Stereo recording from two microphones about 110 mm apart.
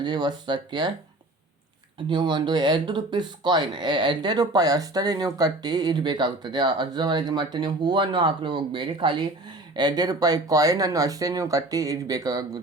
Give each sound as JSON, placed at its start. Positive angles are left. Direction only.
{"t": 0.0, "sound": "speech", "side_deg": -45}
{"t": 2.0, "sound": "speech", "side_deg": -45}